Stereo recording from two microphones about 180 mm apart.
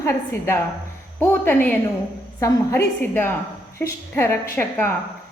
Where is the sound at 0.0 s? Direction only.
15° left (ahead or behind).